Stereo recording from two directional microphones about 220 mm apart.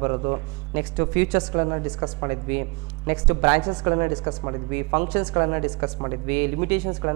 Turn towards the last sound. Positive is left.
turn(degrees=-15)  # may be behind; listen again after turning